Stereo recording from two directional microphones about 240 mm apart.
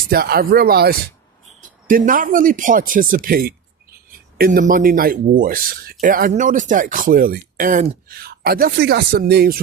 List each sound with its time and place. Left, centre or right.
0.1 s speech: right